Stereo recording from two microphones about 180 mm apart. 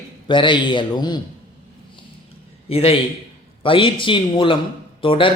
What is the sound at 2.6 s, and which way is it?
A man's voice, 30° left (ahead or behind).